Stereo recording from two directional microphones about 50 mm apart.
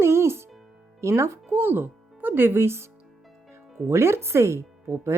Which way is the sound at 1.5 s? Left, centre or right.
Right.